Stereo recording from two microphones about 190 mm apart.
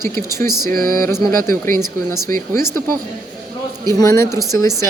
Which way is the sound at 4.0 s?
15° left (ahead or behind).